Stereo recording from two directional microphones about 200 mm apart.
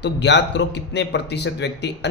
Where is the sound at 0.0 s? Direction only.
60° left (ahead or behind).